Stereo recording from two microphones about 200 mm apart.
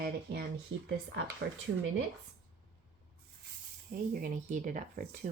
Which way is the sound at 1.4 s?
60° right (ahead or behind).